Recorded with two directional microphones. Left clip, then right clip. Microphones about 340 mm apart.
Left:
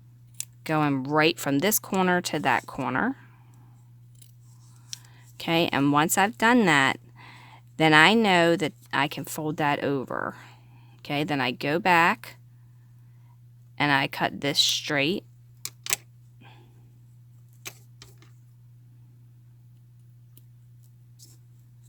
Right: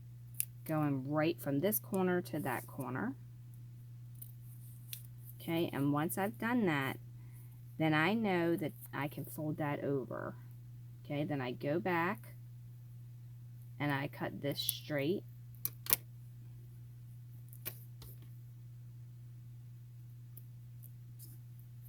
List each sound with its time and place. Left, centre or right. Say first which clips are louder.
0.6 s speech: left 12 dB; left
5.4 s speech: left 13 dB; left
13.7 s speech: left 15 dB; left